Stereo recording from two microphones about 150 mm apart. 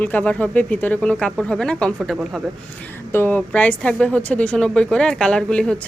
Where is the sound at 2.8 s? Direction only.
10° left (ahead or behind).